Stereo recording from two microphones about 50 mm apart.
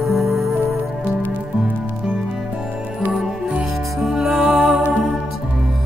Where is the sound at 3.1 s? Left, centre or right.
Centre.